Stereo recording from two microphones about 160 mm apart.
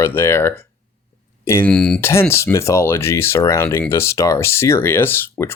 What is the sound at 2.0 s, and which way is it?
Speech, 15° left (ahead or behind).